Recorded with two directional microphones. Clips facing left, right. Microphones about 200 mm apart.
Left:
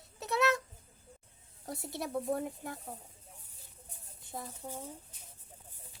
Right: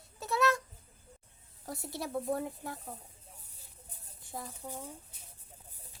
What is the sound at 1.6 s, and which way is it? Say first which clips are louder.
A child's voice: even; 20° left (ahead or behind).